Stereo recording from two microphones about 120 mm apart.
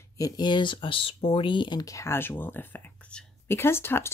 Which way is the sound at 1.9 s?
20° left (ahead or behind).